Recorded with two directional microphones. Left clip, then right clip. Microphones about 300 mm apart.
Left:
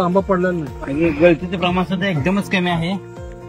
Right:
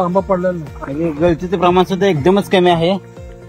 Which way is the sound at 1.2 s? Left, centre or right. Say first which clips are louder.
Right 2 dB; centre.